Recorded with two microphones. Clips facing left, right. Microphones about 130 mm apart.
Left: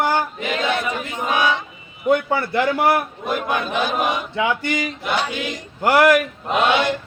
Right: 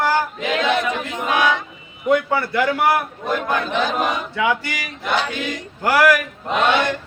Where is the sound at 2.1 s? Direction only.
30° left (ahead or behind).